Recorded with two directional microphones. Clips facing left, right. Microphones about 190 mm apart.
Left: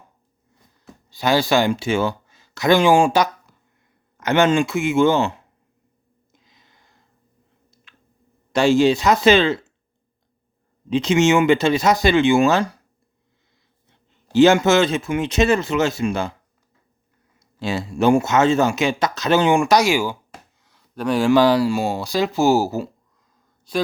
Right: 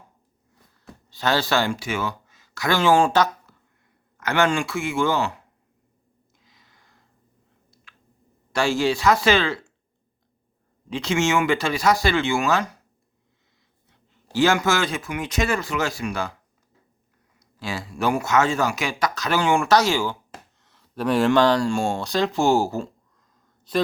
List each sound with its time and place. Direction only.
0.7 s speech: 10° left (ahead or behind)
6.3 s a sound: 20° left (ahead or behind)
8.5 s speech: 20° left (ahead or behind)
10.8 s speech: 20° left (ahead or behind)
14.3 s speech: 20° left (ahead or behind)
17.4 s speech: 25° left (ahead or behind)
20.6 s speech: centre (ahead or behind)